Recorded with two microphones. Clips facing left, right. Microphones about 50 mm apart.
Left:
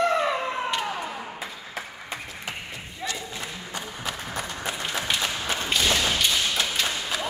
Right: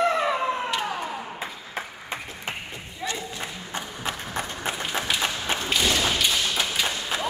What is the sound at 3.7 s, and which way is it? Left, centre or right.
Run, right.